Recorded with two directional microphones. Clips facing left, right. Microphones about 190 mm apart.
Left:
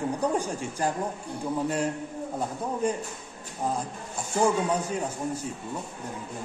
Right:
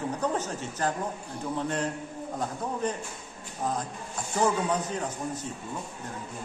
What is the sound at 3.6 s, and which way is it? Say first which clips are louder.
A man's voice: left 1 dB; 10° left (ahead or behind).